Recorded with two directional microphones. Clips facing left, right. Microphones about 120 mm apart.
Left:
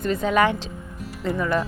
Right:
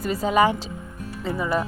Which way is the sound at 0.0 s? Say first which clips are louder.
Even; 5° right (ahead or behind).